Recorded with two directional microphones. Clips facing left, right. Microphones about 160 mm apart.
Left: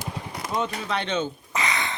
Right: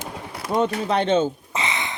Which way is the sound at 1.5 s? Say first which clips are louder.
Left 3 dB; 20° right (ahead or behind).